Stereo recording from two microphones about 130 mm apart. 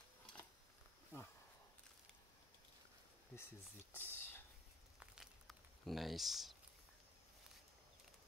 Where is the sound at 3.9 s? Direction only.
15° left (ahead or behind).